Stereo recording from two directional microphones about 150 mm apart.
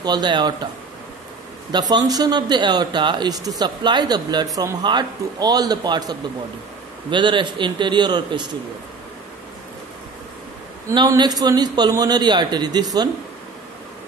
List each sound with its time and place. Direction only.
0.0 s speech: 30° right (ahead or behind)
1.7 s a man's voice: 25° right (ahead or behind)
10.9 s speech: 25° right (ahead or behind)